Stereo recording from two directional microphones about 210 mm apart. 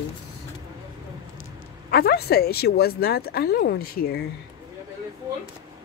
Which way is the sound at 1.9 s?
50° left (ahead or behind).